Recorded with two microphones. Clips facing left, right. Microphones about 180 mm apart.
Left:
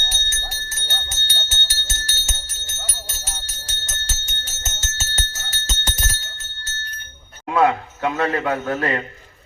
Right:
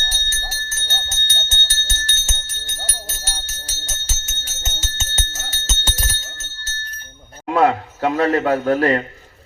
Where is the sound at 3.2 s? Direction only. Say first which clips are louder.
Right 2 dB; 5° right (ahead or behind).